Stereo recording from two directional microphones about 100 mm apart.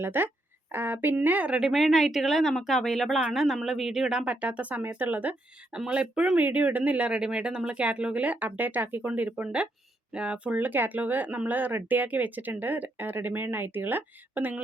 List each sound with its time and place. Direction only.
0.0 s speech: 20° right (ahead or behind)